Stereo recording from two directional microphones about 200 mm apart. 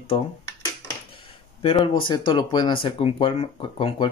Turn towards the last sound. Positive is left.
turn(degrees=25)  # may be behind; listen again after turning